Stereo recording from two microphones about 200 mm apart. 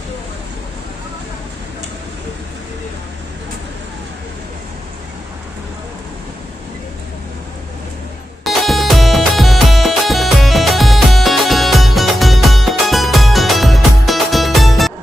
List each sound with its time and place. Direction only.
8.5 s music: centre (ahead or behind)